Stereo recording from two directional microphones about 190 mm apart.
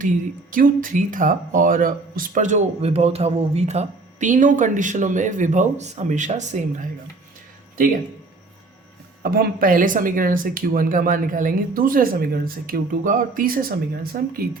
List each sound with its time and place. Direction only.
0.5 s speech: 45° right (ahead or behind)
9.2 s speech: 50° right (ahead or behind)